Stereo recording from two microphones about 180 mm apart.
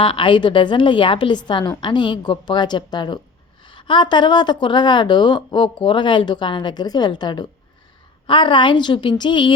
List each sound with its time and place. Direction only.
0.0 s speech: 30° left (ahead or behind)